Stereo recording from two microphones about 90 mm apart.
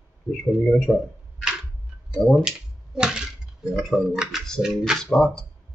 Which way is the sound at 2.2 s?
5° right (ahead or behind).